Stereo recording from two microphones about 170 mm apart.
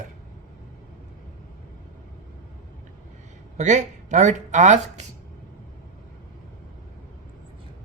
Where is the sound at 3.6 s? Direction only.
45° right (ahead or behind).